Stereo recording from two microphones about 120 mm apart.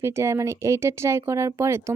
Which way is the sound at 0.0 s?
25° right (ahead or behind).